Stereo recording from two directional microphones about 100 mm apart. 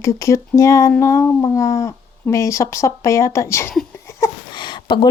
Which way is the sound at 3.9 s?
25° left (ahead or behind).